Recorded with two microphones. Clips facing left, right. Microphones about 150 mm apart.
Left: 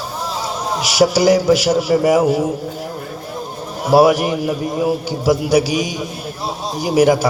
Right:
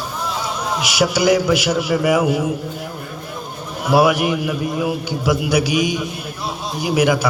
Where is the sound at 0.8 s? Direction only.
40° left (ahead or behind).